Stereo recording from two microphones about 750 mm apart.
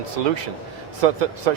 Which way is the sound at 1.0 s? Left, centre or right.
Right.